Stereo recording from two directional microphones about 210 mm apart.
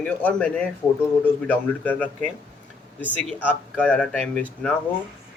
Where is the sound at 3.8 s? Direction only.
5° left (ahead or behind).